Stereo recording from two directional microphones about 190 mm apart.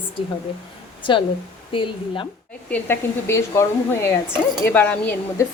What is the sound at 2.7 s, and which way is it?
Speech, 10° left (ahead or behind).